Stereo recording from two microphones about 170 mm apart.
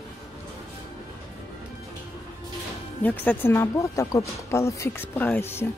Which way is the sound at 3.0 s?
10° left (ahead or behind).